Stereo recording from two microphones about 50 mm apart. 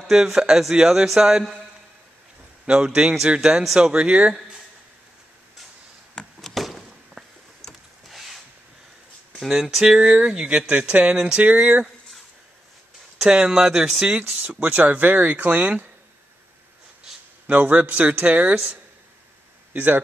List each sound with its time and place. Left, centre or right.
0.1 s speech: centre
2.6 s speech: centre
6.4 s a sound: centre
9.4 s speech: centre
9.8 s speech: right
13.2 s speech: centre
14.6 s speech: right
17.5 s speech: right
19.7 s speech: right